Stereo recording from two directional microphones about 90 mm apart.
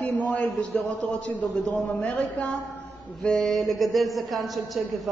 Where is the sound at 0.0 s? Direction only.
15° left (ahead or behind).